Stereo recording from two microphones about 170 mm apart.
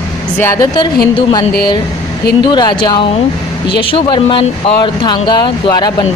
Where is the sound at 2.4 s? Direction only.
25° left (ahead or behind).